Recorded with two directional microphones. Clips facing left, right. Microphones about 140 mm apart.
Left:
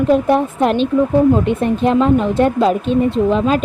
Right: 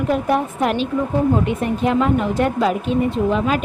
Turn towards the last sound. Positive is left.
turn(degrees=25)  # may be behind; listen again after turning